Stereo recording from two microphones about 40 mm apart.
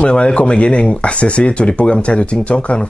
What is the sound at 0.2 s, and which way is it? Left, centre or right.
Speech, left.